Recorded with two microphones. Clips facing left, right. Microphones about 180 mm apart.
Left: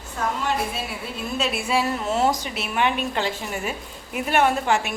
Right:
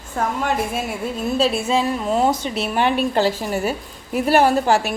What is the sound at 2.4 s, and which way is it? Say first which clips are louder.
A woman's voice: right 4 dB; 30° right (ahead or behind).